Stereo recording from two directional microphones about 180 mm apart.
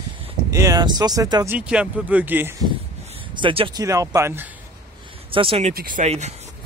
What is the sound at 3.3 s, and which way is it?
Speech, 30° right (ahead or behind).